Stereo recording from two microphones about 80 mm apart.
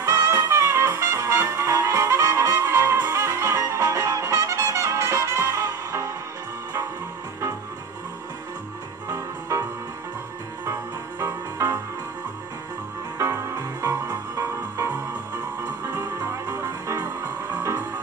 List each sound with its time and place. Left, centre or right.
0.0 s music: right
9.1 s music: right
13.2 s music: right